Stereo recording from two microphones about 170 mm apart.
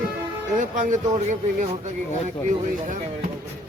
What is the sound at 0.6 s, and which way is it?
Speech, 45° right (ahead or behind).